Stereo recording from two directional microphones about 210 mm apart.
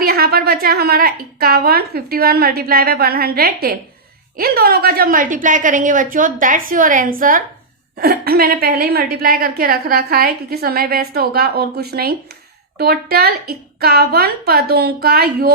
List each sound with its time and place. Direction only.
0.0 s a woman's voice: 45° right (ahead or behind)